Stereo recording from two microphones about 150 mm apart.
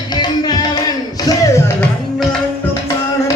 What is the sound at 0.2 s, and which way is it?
Music, 30° left (ahead or behind).